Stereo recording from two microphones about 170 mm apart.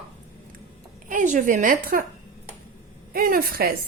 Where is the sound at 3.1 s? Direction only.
55° right (ahead or behind).